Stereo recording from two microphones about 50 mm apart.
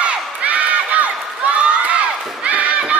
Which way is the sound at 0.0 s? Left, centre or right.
Right.